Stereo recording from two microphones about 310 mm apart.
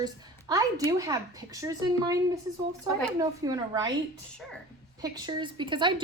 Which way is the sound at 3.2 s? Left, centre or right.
Centre.